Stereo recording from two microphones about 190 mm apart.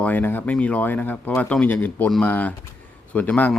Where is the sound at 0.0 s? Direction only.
10° left (ahead or behind).